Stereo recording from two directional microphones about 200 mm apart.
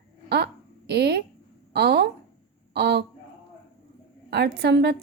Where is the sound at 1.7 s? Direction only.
55° right (ahead or behind).